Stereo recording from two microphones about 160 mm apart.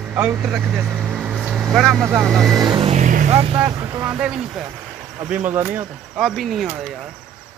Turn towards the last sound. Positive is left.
turn(degrees=0)  # may be behind; listen again after turning